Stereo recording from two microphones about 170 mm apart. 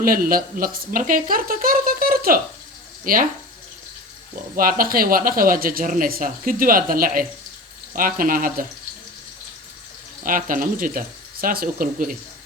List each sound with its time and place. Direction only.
0.0 s speech: 55° right (ahead or behind)
4.5 s speech: 55° right (ahead or behind)
10.2 s speech: 50° right (ahead or behind)